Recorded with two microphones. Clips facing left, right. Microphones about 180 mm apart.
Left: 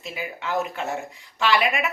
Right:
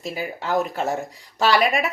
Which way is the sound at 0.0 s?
40° right (ahead or behind).